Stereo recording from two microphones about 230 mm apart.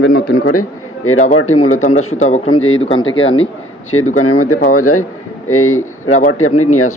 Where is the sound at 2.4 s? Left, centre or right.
Left.